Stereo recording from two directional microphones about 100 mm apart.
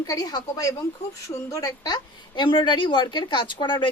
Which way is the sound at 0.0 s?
40° left (ahead or behind).